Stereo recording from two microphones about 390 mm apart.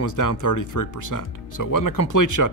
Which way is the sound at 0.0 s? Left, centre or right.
Left.